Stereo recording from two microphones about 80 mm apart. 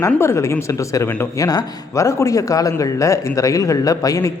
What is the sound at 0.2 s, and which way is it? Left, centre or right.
A man's voice, left.